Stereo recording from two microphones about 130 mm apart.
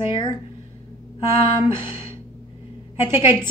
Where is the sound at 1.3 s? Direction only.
40° left (ahead or behind).